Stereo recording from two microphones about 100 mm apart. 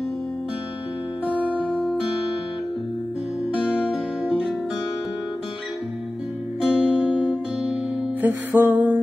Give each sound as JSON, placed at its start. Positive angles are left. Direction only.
{"t": 3.8, "sound": "music", "side_deg": -10}
{"t": 6.6, "sound": "music", "side_deg": -10}
{"t": 8.2, "sound": "music", "side_deg": -20}